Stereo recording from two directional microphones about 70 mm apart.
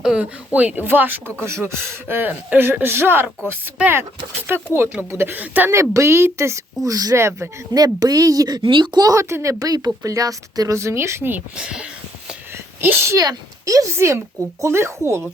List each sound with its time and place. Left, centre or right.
0.0 s speech: centre
0.5 s speech: right
1.5 s speech: right
4.4 s speech: right
5.7 s speech: right
9.3 s speech: right
10.0 s speech: right
10.8 s speech: right
11.5 s speech: centre
12.8 s speech: right
13.1 s speech: right
13.9 s speech: right